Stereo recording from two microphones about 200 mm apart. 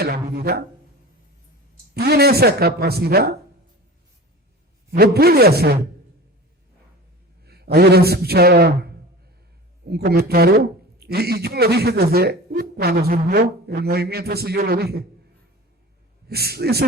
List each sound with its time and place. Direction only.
0.0 s didgeridoo: 50° right (ahead or behind)
1.9 s speech: 50° right (ahead or behind)
4.9 s speech: 50° right (ahead or behind)
7.4 s a man's voice: 55° right (ahead or behind)
10.0 s speech: 50° right (ahead or behind)
16.3 s speech: 55° right (ahead or behind)